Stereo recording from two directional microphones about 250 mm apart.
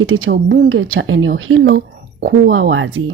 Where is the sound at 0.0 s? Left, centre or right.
Right.